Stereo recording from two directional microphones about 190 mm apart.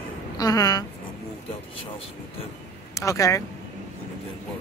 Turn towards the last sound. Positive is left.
turn(degrees=15)  # may be behind; listen again after turning